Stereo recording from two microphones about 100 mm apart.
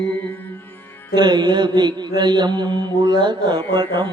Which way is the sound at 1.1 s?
45° right (ahead or behind).